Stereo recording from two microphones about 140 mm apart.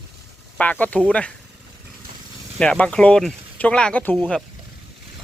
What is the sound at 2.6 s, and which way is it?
Speech, 10° left (ahead or behind).